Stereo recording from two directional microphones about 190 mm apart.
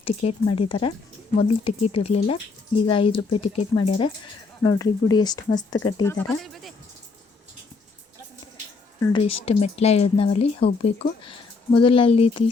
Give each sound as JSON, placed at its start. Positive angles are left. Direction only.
{"t": 0.0, "sound": "speech", "side_deg": 30}
{"t": 6.1, "sound": "speech", "side_deg": 0}
{"t": 9.1, "sound": "speech", "side_deg": 30}